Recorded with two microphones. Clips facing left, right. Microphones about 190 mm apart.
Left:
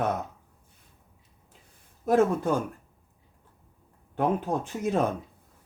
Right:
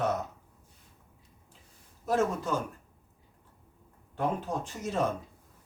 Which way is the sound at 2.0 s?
55° left (ahead or behind).